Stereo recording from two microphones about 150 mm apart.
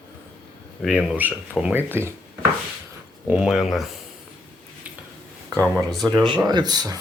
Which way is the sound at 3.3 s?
5° right (ahead or behind).